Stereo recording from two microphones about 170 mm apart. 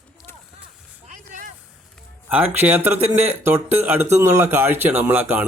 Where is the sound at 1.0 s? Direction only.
50° right (ahead or behind).